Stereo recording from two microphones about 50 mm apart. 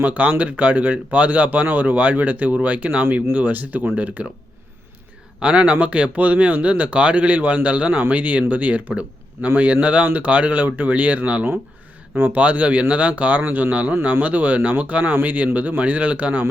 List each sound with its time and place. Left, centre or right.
0.0 s speech: right
5.4 s speech: right
9.4 s a man's voice: right
9.8 s speech: right
12.1 s speech: right
12.4 s speech: right